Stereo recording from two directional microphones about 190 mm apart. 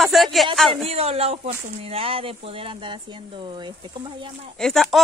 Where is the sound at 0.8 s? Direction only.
35° right (ahead or behind).